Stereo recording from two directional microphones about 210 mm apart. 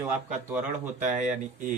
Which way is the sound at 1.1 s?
40° right (ahead or behind).